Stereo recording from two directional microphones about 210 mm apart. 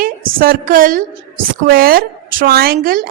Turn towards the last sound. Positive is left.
turn(degrees=-45)  # may be behind; listen again after turning